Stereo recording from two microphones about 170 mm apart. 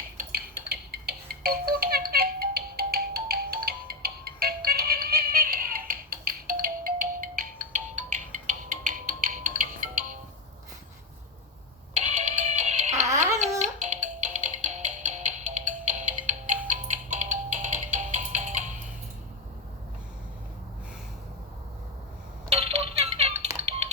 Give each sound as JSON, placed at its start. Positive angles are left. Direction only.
{"t": 0.2, "sound": "music", "side_deg": -60}
{"t": 7.7, "sound": "music", "side_deg": -45}
{"t": 11.9, "sound": "music", "side_deg": -45}
{"t": 22.4, "sound": "music", "side_deg": -40}